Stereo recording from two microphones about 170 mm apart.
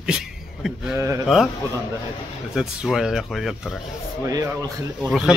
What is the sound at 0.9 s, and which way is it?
Speech, 15° right (ahead or behind).